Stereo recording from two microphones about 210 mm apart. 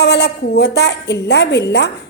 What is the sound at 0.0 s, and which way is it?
A woman's voice, 55° left (ahead or behind).